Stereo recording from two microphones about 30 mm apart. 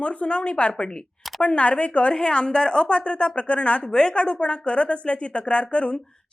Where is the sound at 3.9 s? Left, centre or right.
Left.